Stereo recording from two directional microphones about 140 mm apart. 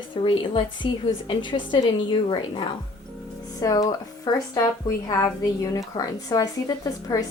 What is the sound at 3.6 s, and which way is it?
A woman's voice, 25° left (ahead or behind).